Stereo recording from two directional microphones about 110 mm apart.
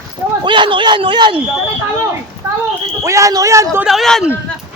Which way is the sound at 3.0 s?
30° right (ahead or behind).